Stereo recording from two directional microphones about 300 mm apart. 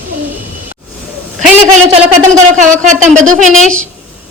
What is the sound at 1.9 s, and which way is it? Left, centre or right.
Speech, right.